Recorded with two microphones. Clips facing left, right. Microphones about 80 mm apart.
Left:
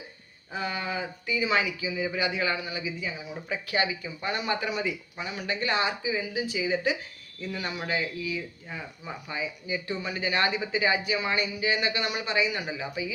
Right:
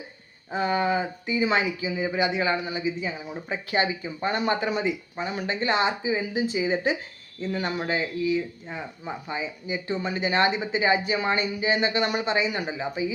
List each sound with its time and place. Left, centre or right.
0.5 s speech: right